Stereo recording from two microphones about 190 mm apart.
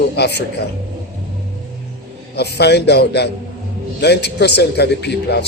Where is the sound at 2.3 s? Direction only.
60° left (ahead or behind).